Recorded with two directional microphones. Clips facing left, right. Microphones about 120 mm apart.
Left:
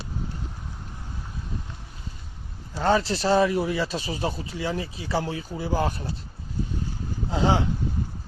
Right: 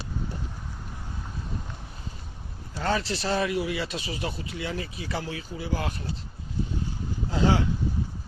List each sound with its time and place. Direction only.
2.7 s speech: 35° left (ahead or behind)
7.3 s speech: 25° left (ahead or behind)